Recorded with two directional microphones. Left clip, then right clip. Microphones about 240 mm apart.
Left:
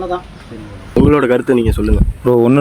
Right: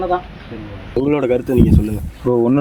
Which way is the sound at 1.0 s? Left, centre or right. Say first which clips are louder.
Left 5 dB; left.